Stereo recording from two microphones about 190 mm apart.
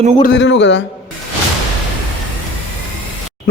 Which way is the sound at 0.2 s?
65° left (ahead or behind).